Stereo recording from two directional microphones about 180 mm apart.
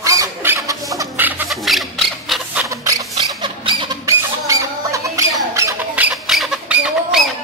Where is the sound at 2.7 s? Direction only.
20° right (ahead or behind).